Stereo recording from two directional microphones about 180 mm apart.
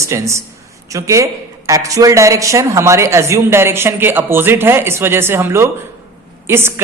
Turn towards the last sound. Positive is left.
turn(degrees=-15)  # may be behind; listen again after turning